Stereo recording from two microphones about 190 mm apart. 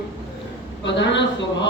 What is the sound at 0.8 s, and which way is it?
Speech, 70° left (ahead or behind).